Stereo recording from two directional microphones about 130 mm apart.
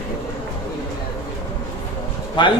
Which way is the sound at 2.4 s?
35° left (ahead or behind).